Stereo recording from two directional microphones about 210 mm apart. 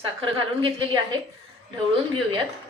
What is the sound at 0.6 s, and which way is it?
Speech, 25° right (ahead or behind).